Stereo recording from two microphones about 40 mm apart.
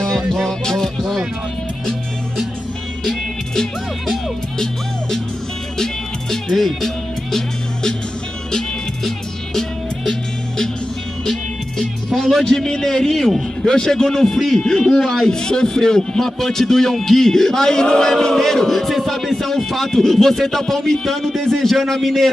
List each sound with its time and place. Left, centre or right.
0.5 s music: centre
6.3 s music: centre
9.0 s music: centre
12.1 s music: centre
12.4 s a man's voice: centre